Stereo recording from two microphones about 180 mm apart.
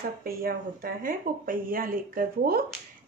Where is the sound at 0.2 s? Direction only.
55° right (ahead or behind).